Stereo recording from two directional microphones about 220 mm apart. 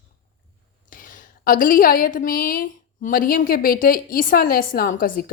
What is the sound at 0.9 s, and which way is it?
A woman's voice, 35° left (ahead or behind).